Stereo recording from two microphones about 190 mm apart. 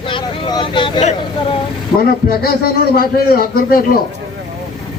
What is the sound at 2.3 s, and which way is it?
A man's voice, 50° left (ahead or behind).